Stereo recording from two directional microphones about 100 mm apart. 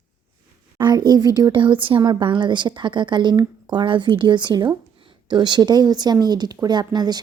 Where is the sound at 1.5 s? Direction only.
55° right (ahead or behind).